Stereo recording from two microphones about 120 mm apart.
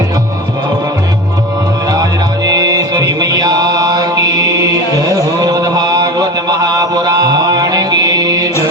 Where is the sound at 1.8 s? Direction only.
30° right (ahead or behind).